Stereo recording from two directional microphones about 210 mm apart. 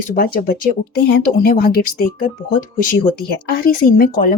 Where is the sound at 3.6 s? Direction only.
45° left (ahead or behind).